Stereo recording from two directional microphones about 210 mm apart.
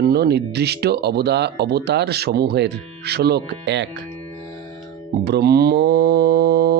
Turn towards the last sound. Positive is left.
turn(degrees=-50)  # may be behind; listen again after turning